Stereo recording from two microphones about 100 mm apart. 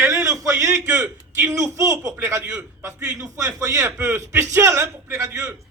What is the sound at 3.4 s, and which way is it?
A man's voice, 30° right (ahead or behind).